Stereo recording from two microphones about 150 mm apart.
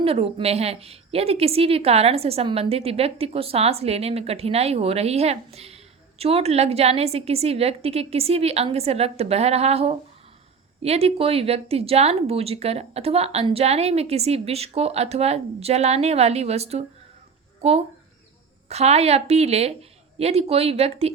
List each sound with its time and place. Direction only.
0.0 s a woman's voice: 40° right (ahead or behind)